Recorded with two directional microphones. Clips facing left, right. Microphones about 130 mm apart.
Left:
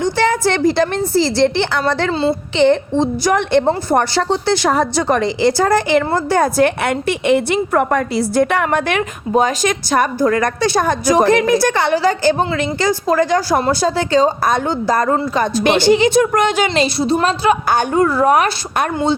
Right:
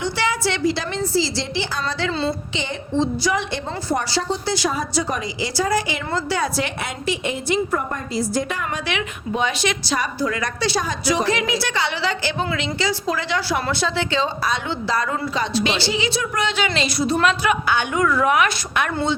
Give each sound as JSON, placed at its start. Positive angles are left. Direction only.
{"t": 0.0, "sound": "a woman's voice", "side_deg": 50}
{"t": 17.0, "sound": "a woman's voice", "side_deg": 30}